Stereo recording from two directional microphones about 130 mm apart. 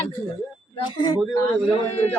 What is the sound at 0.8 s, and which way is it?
Speech, 35° left (ahead or behind).